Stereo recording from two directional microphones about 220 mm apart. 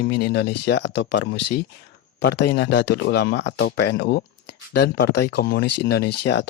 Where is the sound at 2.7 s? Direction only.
90° left.